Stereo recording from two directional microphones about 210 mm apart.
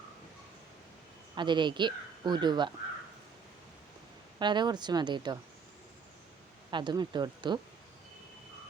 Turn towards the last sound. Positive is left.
turn(degrees=-20)  # may be behind; listen again after turning